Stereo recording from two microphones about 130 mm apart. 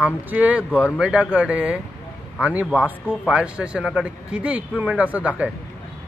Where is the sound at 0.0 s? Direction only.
10° right (ahead or behind).